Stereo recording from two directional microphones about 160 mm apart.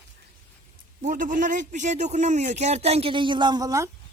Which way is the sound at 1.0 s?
55° right (ahead or behind).